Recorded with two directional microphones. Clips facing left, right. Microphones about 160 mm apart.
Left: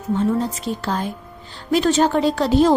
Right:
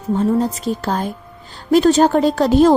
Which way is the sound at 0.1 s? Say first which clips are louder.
Right 3 dB; 40° right (ahead or behind).